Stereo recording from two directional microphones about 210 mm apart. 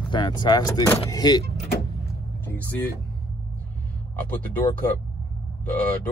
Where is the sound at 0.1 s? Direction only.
20° left (ahead or behind).